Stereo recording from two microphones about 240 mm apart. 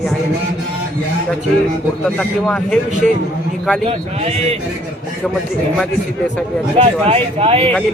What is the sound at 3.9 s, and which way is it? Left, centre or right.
Speech, right.